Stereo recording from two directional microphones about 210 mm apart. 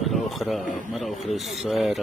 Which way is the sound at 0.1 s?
Centre (ahead or behind).